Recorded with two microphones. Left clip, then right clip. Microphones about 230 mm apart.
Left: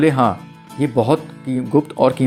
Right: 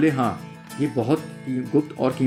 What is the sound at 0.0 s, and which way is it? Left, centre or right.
Speech, left.